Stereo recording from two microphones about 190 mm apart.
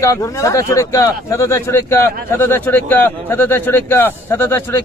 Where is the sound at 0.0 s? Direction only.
15° left (ahead or behind).